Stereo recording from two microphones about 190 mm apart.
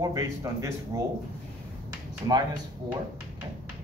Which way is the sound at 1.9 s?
20° right (ahead or behind).